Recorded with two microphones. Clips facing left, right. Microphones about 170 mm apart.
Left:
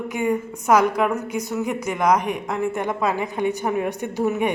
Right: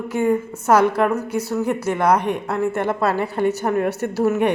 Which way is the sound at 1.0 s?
5° left (ahead or behind).